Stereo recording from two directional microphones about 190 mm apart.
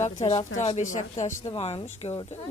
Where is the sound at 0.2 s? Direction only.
25° left (ahead or behind).